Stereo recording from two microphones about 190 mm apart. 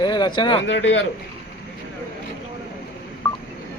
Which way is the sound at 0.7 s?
75° left (ahead or behind).